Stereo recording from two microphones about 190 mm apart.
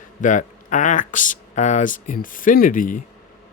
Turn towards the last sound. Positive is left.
turn(degrees=45)  # may be behind; listen again after turning